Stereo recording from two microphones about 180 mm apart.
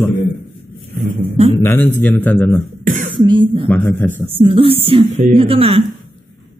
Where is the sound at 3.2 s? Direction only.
25° right (ahead or behind).